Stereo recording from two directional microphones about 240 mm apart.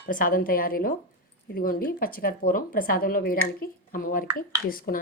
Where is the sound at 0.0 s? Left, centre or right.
Left.